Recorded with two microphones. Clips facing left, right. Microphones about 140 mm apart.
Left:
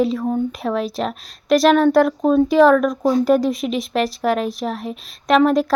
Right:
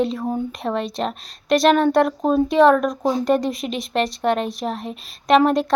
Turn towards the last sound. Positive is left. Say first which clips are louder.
# left 1 dB
turn(degrees=0)  # may be behind; listen again after turning